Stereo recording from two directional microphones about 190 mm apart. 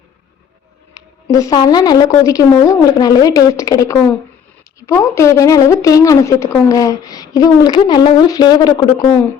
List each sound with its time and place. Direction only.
1.3 s a woman's voice: 20° left (ahead or behind)